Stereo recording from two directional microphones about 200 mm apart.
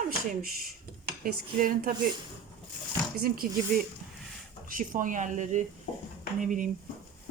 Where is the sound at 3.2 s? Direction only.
50° right (ahead or behind).